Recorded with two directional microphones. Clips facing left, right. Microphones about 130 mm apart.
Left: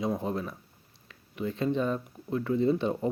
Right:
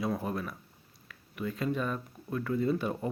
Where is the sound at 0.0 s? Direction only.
20° left (ahead or behind).